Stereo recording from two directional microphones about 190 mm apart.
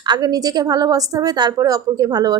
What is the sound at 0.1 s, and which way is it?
A woman's voice, 20° right (ahead or behind).